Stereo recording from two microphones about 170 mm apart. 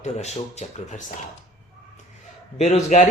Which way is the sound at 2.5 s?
40° left (ahead or behind).